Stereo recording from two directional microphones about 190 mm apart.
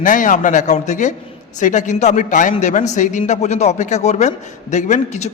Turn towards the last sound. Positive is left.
turn(degrees=35)  # may be behind; listen again after turning